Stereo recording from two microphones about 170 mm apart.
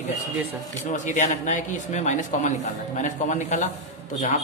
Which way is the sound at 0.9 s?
45° left (ahead or behind).